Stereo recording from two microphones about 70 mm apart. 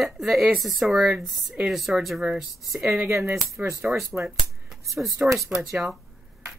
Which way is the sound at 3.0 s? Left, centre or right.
Right.